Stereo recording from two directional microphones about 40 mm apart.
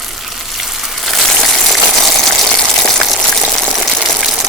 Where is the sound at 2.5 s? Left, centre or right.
Centre.